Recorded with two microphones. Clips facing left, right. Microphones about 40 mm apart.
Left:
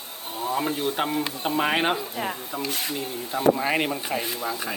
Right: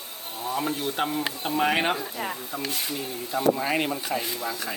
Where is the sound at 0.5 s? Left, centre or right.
Centre.